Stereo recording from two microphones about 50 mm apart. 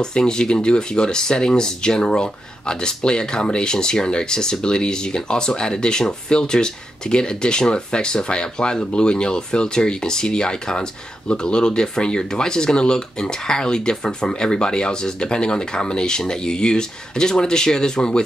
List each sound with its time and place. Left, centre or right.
0.0 s speech: centre